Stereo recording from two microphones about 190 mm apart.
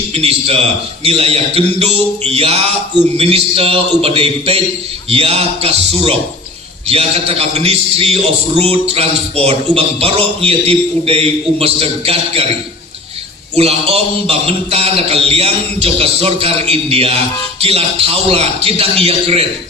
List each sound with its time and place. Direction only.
0.1 s a man's voice: 30° right (ahead or behind)
13.6 s a man's voice: 30° right (ahead or behind)